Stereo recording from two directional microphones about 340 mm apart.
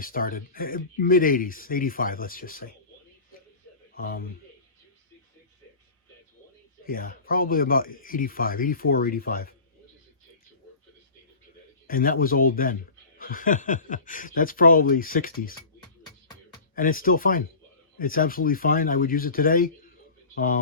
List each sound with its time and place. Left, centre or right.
0.0 s speech: left
3.9 s a man's voice: left
6.8 s speech: left
11.9 s speech: left
16.7 s speech: left